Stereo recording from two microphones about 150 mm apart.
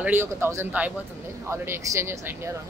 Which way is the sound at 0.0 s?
15° right (ahead or behind).